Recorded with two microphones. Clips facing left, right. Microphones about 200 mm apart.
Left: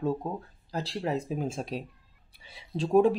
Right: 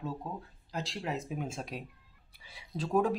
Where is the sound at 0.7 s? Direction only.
35° left (ahead or behind).